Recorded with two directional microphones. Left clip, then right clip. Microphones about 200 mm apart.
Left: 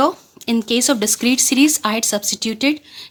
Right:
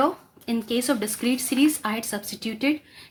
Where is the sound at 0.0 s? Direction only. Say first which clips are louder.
Left 6 dB; 45° left (ahead or behind).